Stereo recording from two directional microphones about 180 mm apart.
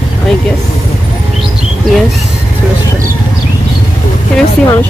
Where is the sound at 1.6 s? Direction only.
Centre (ahead or behind).